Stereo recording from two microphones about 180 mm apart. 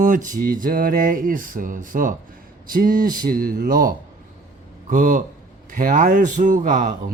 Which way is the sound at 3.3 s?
55° right (ahead or behind).